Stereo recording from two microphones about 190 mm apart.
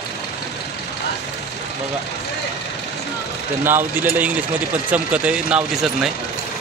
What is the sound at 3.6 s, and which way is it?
Speech, 10° right (ahead or behind).